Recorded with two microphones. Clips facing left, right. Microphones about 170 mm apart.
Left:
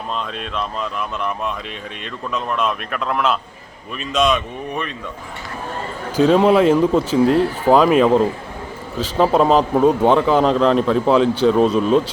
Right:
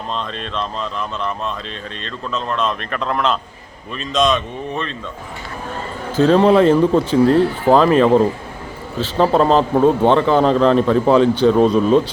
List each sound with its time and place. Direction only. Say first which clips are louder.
0.1 s speech: right 1 dB; 5° left (ahead or behind)
6.1 s a man's voice: right 1 dB; 5° left (ahead or behind)